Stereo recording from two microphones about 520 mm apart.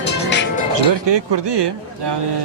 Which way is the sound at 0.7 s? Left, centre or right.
Right.